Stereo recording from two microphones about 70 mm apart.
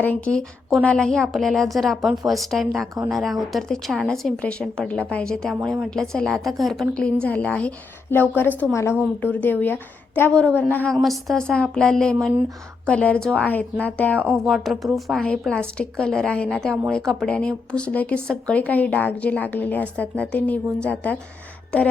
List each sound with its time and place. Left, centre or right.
0.0 s speech: left
0.9 s a woman's voice: centre
6.9 s a woman's voice: centre
8.7 s a woman's voice: left
9.2 s speech: left
10.3 s speech: centre
11.0 s a woman's voice: centre
11.4 s a woman's voice: centre
13.5 s speech: left
14.4 s a woman's voice: centre
15.3 s a woman's voice: centre